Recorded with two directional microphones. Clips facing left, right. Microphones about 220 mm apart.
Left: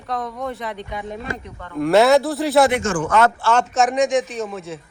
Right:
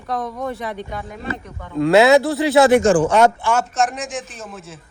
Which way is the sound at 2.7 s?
35° right (ahead or behind).